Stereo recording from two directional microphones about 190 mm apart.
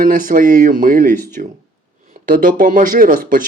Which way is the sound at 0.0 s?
45° right (ahead or behind).